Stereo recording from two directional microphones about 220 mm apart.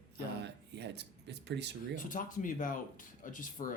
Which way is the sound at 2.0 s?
35° left (ahead or behind).